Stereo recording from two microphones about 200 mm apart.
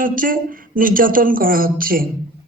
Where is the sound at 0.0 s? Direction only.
45° right (ahead or behind).